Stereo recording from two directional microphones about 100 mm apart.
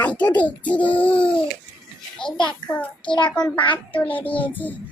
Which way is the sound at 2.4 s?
50° left (ahead or behind).